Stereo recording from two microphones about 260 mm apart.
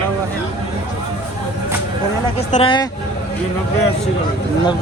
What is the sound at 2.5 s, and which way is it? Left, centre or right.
Speech, centre.